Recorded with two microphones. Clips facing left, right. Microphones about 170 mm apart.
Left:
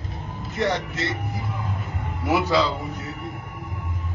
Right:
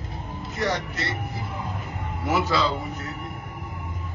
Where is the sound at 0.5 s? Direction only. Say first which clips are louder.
Left 3 dB; 25° left (ahead or behind).